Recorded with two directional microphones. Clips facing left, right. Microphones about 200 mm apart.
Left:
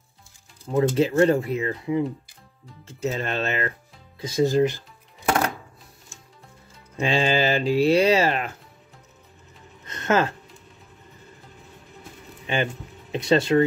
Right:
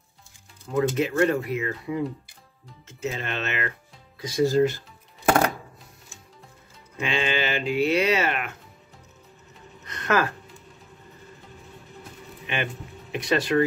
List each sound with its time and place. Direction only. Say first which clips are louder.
0.7 s speech: left 3 dB; 30° left (ahead or behind)
2.9 s speech: left 4 dB; 35° left (ahead or behind)
4.2 s speech: left 1 dB; 25° left (ahead or behind)
7.0 s speech: left 5 dB; 35° left (ahead or behind)
9.8 s music: left 2 dB; 25° left (ahead or behind)
13.1 s speech: left 4 dB; 25° left (ahead or behind)